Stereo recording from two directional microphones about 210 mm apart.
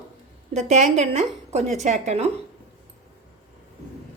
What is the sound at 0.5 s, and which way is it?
A woman's voice, 35° right (ahead or behind).